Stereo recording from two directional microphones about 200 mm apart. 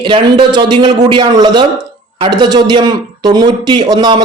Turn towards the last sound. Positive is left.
turn(degrees=-20)  # may be behind; listen again after turning